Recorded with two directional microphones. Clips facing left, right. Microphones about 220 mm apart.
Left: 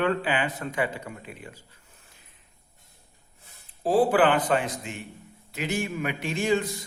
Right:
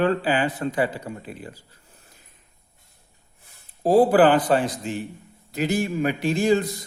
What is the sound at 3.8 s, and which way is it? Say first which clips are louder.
A man's voice: right 5 dB; 40° right (ahead or behind).